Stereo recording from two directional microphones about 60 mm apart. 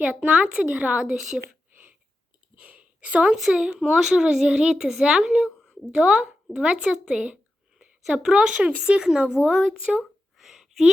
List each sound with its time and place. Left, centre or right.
0.0 s speech: centre
0.9 s speech: centre
2.6 s a sound: right
3.3 s speech: centre
7.1 s a woman's voice: centre
10.3 s a sound: centre